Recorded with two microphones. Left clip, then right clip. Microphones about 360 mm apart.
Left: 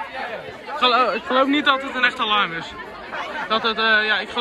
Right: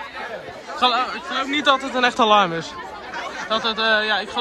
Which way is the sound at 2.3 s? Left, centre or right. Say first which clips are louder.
Right 4 dB; centre.